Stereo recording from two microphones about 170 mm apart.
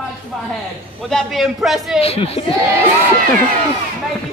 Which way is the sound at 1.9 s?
35° left (ahead or behind).